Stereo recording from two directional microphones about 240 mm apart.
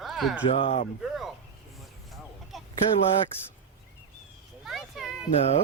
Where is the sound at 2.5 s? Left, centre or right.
Centre.